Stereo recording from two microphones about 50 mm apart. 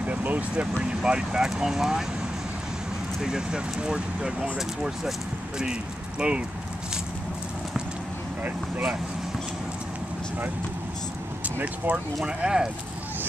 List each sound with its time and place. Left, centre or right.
0.0 s speech: right
0.8 s speech: centre
3.2 s speech: centre
11.6 s speech: right
12.3 s speech: centre